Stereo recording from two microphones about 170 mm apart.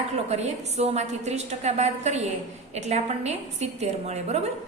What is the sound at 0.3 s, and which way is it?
A woman's voice, 40° right (ahead or behind).